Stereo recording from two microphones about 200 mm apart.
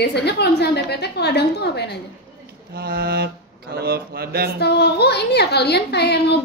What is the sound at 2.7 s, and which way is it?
Mantra, 50° right (ahead or behind).